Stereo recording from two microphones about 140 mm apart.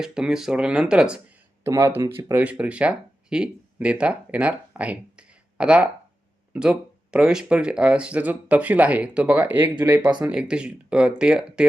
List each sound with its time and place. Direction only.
0.0 s speech: 5° right (ahead or behind)
1.6 s speech: 20° right (ahead or behind)
10.0 s speech: 35° right (ahead or behind)
10.2 s speech: 5° right (ahead or behind)